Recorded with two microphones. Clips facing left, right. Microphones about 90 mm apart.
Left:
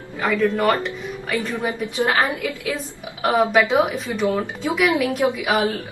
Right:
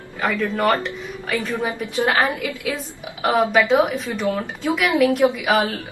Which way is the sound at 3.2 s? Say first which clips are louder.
Even; centre (ahead or behind).